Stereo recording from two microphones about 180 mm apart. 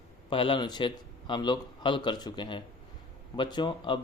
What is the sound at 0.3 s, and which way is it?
Speech, 30° left (ahead or behind).